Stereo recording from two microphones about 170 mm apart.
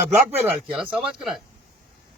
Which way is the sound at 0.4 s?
10° right (ahead or behind).